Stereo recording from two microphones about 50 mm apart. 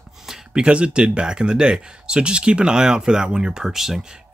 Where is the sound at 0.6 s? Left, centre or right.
Right.